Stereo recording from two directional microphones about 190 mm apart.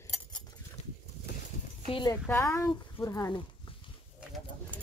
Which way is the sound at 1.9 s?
20° left (ahead or behind).